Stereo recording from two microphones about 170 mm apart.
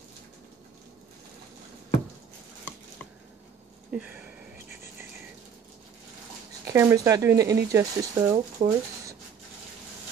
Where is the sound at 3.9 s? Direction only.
10° right (ahead or behind).